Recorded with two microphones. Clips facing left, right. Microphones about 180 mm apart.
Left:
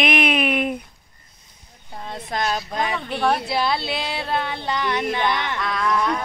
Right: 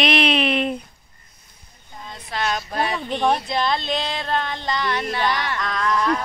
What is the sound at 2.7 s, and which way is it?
Speech, 10° left (ahead or behind).